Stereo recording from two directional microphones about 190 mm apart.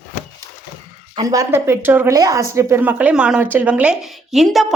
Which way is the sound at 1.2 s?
20° right (ahead or behind).